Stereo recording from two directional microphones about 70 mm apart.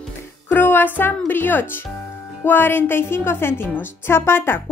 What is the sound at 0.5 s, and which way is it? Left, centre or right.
A woman's voice, left.